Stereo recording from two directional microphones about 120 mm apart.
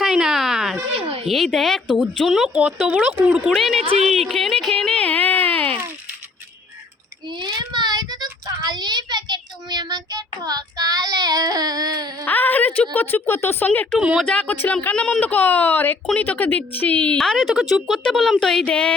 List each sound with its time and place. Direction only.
0.0 s a sound: 5° right (ahead or behind)
0.9 s children playing: 50° right (ahead or behind)
1.3 s speech: centre (ahead or behind)
4.0 s a sound: centre (ahead or behind)
7.3 s child singing: 40° right (ahead or behind)
12.2 s a woman's voice: 15° left (ahead or behind)
14.0 s speech: 10° right (ahead or behind)
14.3 s speech: 10° left (ahead or behind)